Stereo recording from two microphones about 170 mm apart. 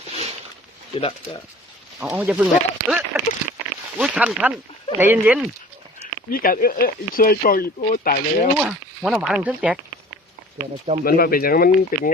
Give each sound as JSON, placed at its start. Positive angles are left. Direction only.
{"t": 0.9, "sound": "speech", "side_deg": 35}
{"t": 2.0, "sound": "speech", "side_deg": -5}
{"t": 6.3, "sound": "speech", "side_deg": 60}
{"t": 8.5, "sound": "speech", "side_deg": -5}
{"t": 11.0, "sound": "speech", "side_deg": 60}